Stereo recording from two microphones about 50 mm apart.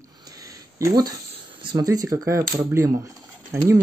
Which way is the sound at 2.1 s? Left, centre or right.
Right.